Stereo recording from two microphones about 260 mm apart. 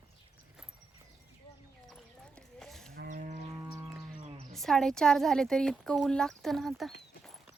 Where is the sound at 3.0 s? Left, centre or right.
Right.